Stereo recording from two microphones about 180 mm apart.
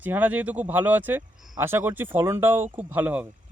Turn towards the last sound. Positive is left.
turn(degrees=-10)  # may be behind; listen again after turning